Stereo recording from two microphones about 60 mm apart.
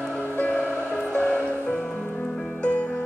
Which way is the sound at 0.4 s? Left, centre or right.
Left.